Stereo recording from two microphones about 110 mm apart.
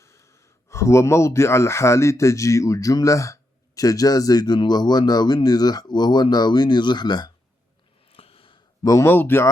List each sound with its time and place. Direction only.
0.0 s speech: 25° left (ahead or behind)
8.0 s a sound: 60° left (ahead or behind)
8.8 s speech: 30° left (ahead or behind)